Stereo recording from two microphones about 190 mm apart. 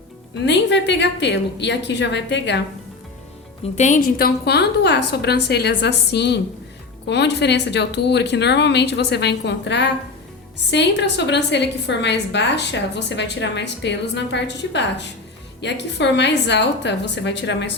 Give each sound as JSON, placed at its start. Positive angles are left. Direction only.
{"t": 0.4, "sound": "a woman's voice", "side_deg": 65}
{"t": 3.8, "sound": "a woman's voice", "side_deg": 40}